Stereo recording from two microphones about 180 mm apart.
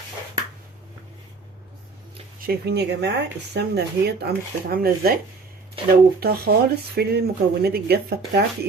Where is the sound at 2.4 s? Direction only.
60° right (ahead or behind).